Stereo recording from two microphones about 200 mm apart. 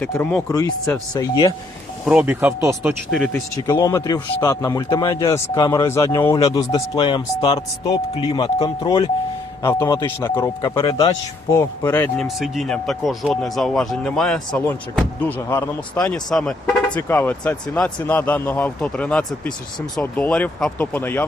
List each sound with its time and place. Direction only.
0.0 s speech: 5° left (ahead or behind)
2.0 s speech: 5° right (ahead or behind)
3.7 s speech: 15° left (ahead or behind)